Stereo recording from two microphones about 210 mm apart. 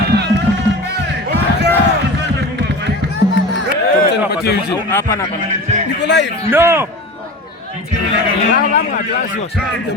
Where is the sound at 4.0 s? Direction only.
50° left (ahead or behind).